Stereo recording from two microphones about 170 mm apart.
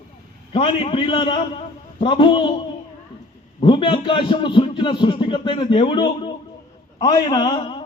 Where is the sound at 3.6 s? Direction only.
30° left (ahead or behind).